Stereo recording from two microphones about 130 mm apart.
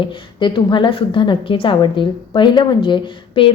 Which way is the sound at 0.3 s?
35° left (ahead or behind).